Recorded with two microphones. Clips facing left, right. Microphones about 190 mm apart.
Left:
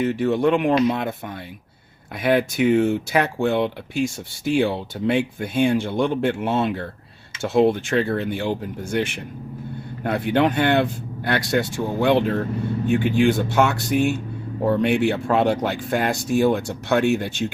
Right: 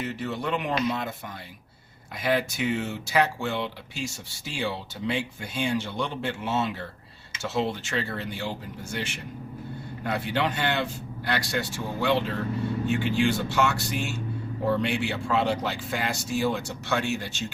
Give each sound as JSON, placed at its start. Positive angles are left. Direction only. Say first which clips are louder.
{"t": 0.0, "sound": "speech", "louder": "left 11 dB", "side_deg": 55}
{"t": 2.2, "sound": "speech", "louder": "left 7 dB", "side_deg": 55}